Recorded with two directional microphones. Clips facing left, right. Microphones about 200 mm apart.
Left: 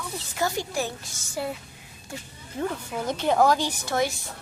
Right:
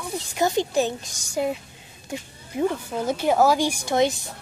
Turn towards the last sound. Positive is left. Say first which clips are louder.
# right 5 dB
turn(degrees=-20)  # may be behind; listen again after turning